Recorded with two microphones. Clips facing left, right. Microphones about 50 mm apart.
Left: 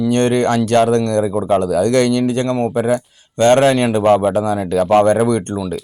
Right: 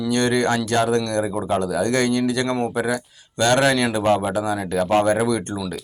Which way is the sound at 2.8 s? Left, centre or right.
Left.